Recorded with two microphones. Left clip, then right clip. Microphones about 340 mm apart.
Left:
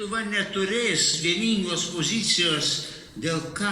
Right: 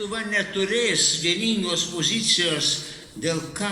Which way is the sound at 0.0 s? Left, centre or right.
Centre.